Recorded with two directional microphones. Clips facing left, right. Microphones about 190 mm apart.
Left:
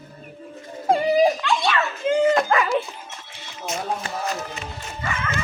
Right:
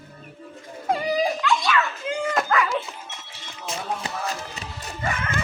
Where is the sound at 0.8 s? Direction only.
30° left (ahead or behind).